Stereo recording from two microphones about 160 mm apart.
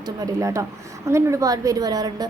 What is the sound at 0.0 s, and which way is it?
A woman's voice, 20° right (ahead or behind).